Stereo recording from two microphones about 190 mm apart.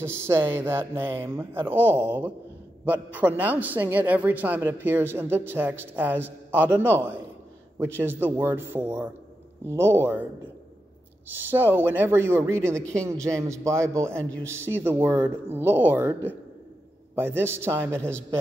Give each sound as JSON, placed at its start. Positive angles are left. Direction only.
{"t": 0.0, "sound": "a man's voice", "side_deg": -15}
{"t": 11.2, "sound": "a man's voice", "side_deg": -10}
{"t": 13.9, "sound": "a man's voice", "side_deg": 5}
{"t": 14.4, "sound": "a man's voice", "side_deg": -15}